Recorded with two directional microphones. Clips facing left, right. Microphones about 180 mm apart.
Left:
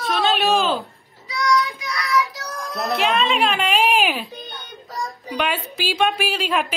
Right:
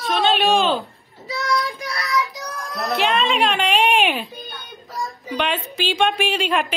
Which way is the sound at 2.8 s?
Centre (ahead or behind).